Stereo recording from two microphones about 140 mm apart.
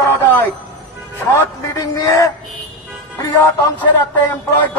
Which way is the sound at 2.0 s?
25° left (ahead or behind).